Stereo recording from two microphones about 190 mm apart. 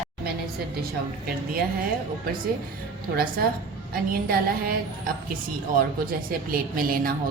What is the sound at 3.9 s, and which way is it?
Speech, 50° right (ahead or behind).